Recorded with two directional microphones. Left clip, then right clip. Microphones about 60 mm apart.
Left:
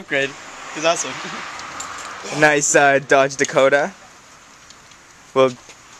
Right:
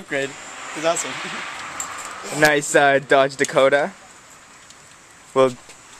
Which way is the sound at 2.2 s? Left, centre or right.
Left.